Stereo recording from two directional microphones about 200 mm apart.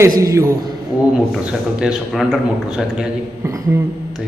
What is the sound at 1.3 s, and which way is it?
A man's voice, 5° right (ahead or behind).